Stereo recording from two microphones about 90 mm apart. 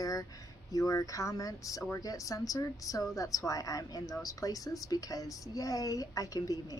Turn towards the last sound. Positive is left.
turn(degrees=40)  # may be behind; listen again after turning